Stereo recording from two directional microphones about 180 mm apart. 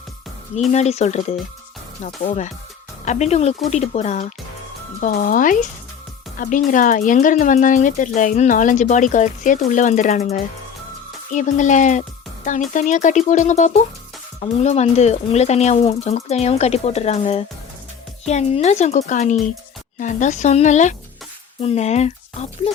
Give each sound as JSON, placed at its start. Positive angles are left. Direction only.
{"t": 0.7, "sound": "speech", "side_deg": 40}